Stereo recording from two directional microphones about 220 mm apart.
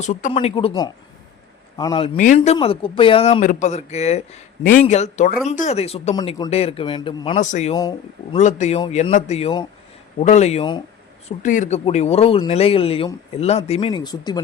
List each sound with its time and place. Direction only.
0.0 s speech: 35° left (ahead or behind)
0.3 s speech: 25° left (ahead or behind)
2.1 s speech: 35° left (ahead or behind)
7.3 s speech: 35° left (ahead or behind)
7.8 s speech: 20° left (ahead or behind)
8.4 s speech: 30° left (ahead or behind)
11.3 s speech: 35° left (ahead or behind); by 14.4 s 20° left (ahead or behind)